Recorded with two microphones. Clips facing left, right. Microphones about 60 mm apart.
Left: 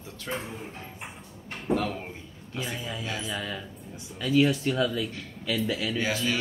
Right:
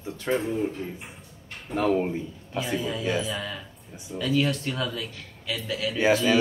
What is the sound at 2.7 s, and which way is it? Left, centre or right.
Speech, centre.